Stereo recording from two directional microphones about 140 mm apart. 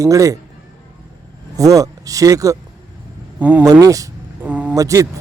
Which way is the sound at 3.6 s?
25° right (ahead or behind).